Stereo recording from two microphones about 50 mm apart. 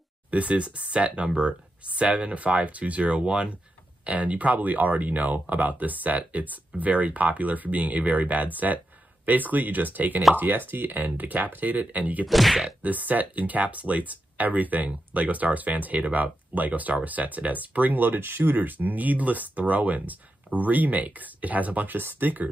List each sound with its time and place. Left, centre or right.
0.3 s speech: right
12.3 s speech: centre
12.8 s speech: right